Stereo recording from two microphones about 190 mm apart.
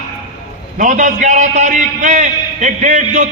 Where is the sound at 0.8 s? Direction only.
40° right (ahead or behind).